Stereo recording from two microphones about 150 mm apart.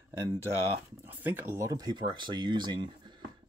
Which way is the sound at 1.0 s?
10° right (ahead or behind).